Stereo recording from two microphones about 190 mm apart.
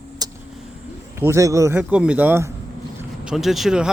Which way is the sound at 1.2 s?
15° right (ahead or behind).